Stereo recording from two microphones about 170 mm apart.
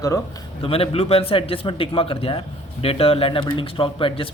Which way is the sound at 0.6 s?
35° left (ahead or behind).